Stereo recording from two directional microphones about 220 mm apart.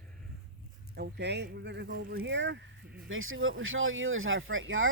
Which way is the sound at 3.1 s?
65° right (ahead or behind).